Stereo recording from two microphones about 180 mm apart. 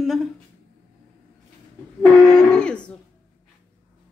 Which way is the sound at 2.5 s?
5° left (ahead or behind).